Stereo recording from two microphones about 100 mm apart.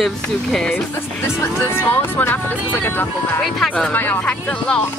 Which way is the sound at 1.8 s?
20° left (ahead or behind).